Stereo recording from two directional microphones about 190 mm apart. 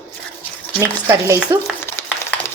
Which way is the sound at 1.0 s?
15° right (ahead or behind).